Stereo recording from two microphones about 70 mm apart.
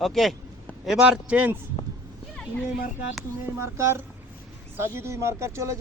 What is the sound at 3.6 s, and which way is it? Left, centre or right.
Speech, right.